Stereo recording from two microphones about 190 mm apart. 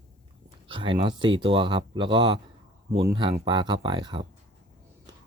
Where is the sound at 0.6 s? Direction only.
25° right (ahead or behind).